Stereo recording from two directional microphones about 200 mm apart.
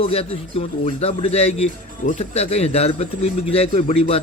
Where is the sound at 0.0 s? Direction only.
30° left (ahead or behind).